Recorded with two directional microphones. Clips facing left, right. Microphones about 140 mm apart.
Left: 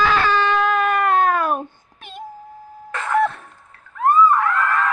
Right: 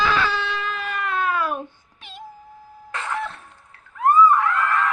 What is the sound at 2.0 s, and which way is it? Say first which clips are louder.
Music: left 5 dB; 50° left (ahead or behind).